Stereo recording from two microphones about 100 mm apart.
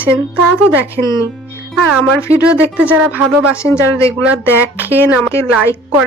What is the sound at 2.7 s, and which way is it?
Speech, 15° right (ahead or behind).